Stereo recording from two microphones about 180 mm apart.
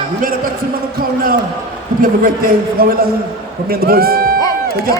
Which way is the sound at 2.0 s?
50° right (ahead or behind).